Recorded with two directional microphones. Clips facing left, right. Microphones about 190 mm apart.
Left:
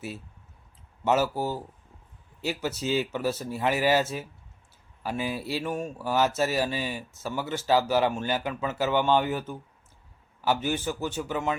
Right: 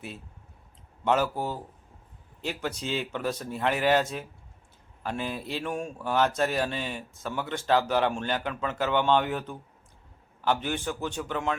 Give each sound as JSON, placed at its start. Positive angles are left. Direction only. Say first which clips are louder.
{"t": 1.0, "sound": "speech", "louder": "left 1 dB", "side_deg": 5}